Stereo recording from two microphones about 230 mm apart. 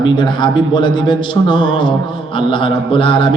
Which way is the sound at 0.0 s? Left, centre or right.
Centre.